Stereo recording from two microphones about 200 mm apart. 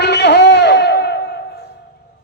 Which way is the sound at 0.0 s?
60° left (ahead or behind).